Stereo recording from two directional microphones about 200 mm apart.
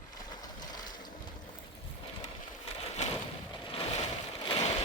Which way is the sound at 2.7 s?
30° left (ahead or behind).